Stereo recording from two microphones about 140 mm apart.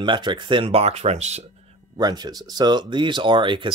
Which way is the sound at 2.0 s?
30° right (ahead or behind).